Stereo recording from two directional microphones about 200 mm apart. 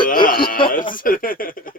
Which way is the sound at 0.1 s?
45° left (ahead or behind).